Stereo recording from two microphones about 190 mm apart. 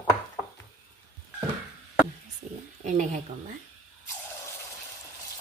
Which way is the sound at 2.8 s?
40° right (ahead or behind).